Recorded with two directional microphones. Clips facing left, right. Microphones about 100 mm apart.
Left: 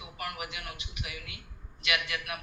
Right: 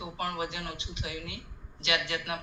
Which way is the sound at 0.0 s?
30° right (ahead or behind).